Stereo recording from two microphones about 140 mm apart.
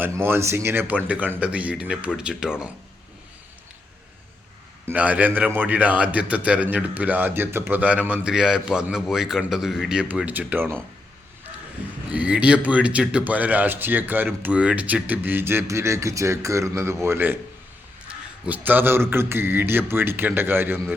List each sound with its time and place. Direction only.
0.0 s speech: 15° right (ahead or behind)
4.9 s speech: 10° right (ahead or behind)
11.8 s speech: 10° right (ahead or behind)